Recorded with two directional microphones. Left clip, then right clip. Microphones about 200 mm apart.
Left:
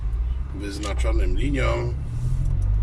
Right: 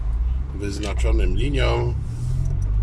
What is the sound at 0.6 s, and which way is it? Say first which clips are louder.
Speech: right 2 dB; 10° right (ahead or behind).